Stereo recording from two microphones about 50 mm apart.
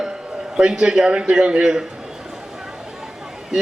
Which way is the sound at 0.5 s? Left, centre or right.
Centre.